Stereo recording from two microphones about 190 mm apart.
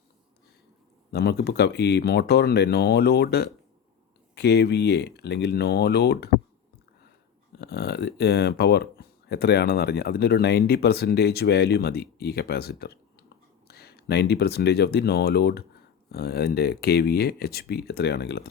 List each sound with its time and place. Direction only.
1.1 s speech: 55° left (ahead or behind)
7.5 s speech: 60° left (ahead or behind)